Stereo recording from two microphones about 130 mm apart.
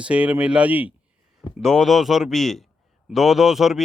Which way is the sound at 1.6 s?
Centre (ahead or behind).